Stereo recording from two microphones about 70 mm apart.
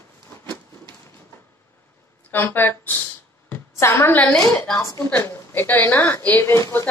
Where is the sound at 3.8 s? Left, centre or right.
Left.